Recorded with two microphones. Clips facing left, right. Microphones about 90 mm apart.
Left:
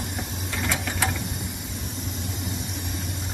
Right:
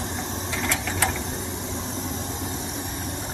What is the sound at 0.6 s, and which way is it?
Ratchet, 5° left (ahead or behind).